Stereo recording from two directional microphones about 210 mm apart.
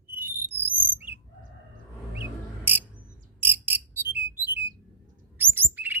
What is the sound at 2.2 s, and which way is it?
Cricket, 10° right (ahead or behind).